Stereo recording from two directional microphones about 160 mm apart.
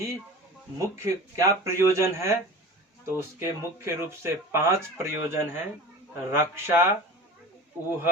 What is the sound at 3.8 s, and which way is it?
Speech, 15° right (ahead or behind).